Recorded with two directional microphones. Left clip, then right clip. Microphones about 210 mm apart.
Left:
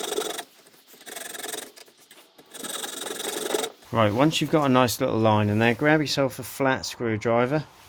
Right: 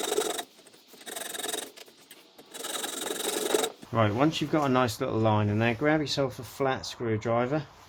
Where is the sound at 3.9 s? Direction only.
50° left (ahead or behind).